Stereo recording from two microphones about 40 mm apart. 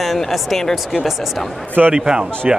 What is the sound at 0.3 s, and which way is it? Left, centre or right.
Speech, centre.